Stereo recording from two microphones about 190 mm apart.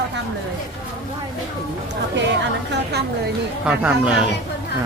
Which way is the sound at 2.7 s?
60° right (ahead or behind).